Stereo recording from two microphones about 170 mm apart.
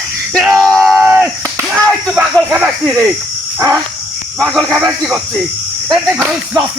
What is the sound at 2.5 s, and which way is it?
Snake, 15° right (ahead or behind).